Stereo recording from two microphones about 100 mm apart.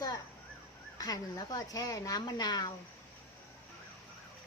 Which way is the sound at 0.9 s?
35° left (ahead or behind).